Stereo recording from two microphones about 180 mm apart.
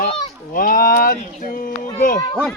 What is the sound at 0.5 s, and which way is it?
Speech, 50° left (ahead or behind).